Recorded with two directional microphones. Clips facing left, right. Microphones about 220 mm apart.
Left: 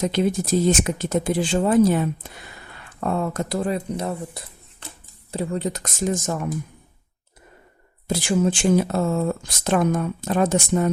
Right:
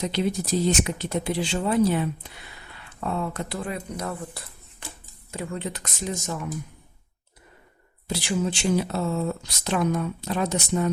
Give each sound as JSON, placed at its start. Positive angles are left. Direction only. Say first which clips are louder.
{"t": 0.0, "sound": "speech", "louder": "left 4 dB", "side_deg": 50}
{"t": 8.0, "sound": "speech", "louder": "left 6 dB", "side_deg": 50}